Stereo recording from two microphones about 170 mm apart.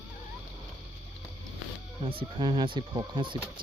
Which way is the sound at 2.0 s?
30° right (ahead or behind).